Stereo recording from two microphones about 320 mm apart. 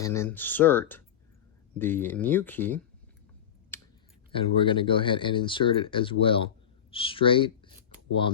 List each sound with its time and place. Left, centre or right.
0.0 s speech: centre
3.7 s a sound: centre
4.3 s speech: centre